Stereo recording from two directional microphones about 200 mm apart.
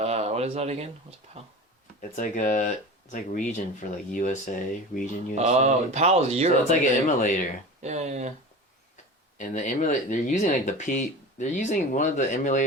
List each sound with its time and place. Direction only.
0.0 s a sound: 30° right (ahead or behind)
2.0 s speech: 40° left (ahead or behind)
5.3 s speech: 35° right (ahead or behind)
7.2 s speech: 40° left (ahead or behind)
7.8 s speech: 35° right (ahead or behind)
9.4 s speech: 40° left (ahead or behind)